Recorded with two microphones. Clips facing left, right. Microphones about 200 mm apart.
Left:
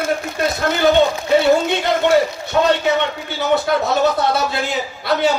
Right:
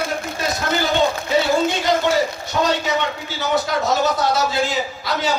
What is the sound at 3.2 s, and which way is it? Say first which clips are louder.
A man's voice: left 4 dB; 60° left (ahead or behind).